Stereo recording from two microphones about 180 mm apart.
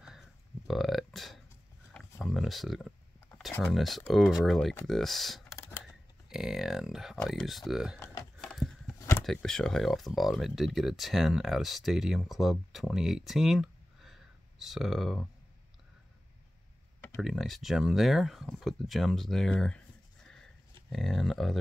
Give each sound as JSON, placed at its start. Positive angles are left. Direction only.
{"t": 0.7, "sound": "a sound", "side_deg": 0}
{"t": 3.6, "sound": "speech", "side_deg": 0}
{"t": 4.8, "sound": "computer keyboard", "side_deg": 0}
{"t": 6.2, "sound": "speech", "side_deg": 0}
{"t": 8.0, "sound": "typing", "side_deg": 15}
{"t": 8.4, "sound": "a sound", "side_deg": 0}
{"t": 9.2, "sound": "speech", "side_deg": 0}
{"t": 17.2, "sound": "speech", "side_deg": 0}
{"t": 20.9, "sound": "speech", "side_deg": 0}